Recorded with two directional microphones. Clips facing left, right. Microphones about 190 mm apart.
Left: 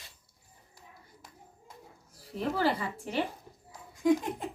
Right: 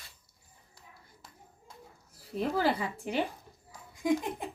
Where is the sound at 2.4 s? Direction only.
15° right (ahead or behind).